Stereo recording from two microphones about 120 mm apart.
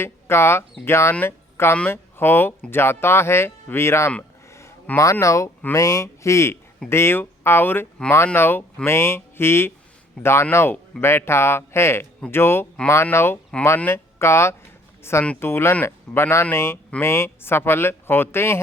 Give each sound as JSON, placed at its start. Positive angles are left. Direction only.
{"t": 0.0, "sound": "speech", "side_deg": 20}